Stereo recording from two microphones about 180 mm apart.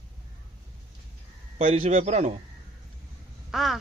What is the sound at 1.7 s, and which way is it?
Speech, 30° right (ahead or behind).